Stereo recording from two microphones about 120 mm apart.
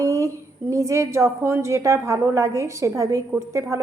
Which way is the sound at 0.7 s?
25° right (ahead or behind).